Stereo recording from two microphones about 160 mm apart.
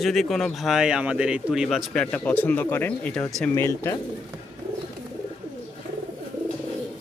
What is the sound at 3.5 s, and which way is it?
Speech, 15° left (ahead or behind).